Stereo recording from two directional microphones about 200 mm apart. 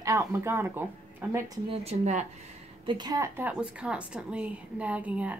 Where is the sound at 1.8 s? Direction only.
35° right (ahead or behind).